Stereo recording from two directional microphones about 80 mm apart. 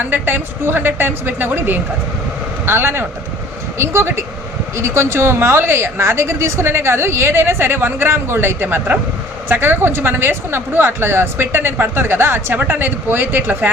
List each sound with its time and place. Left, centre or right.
0.0 s a woman's voice: right